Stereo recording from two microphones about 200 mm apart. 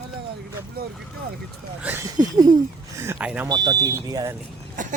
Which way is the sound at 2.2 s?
20° right (ahead or behind).